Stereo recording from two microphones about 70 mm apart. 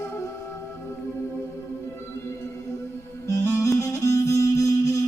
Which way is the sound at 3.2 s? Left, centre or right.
Left.